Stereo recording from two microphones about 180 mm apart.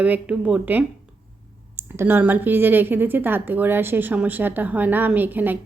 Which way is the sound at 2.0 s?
10° right (ahead or behind).